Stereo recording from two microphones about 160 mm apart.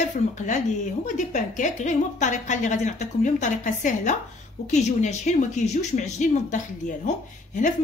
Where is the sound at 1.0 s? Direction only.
50° left (ahead or behind).